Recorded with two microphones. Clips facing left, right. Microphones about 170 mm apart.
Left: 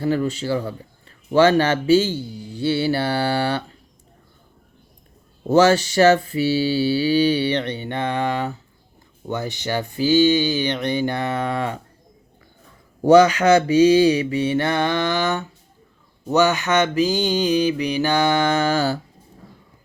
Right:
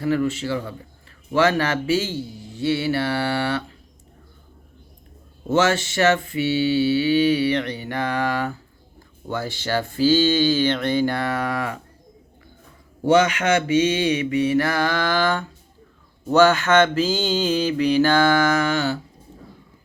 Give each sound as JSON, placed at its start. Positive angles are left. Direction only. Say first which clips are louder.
{"t": 0.0, "sound": "mantra", "louder": "even", "side_deg": 30}
{"t": 5.5, "sound": "mantra", "louder": "left 5 dB", "side_deg": 35}
{"t": 13.1, "sound": "mantra", "louder": "left 5 dB", "side_deg": 35}